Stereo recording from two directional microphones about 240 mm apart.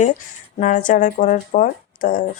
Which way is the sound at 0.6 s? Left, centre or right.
Left.